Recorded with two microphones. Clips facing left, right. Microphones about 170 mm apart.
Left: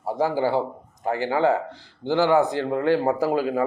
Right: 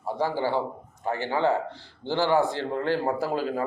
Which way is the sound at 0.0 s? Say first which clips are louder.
Left 4 dB; 45° left (ahead or behind).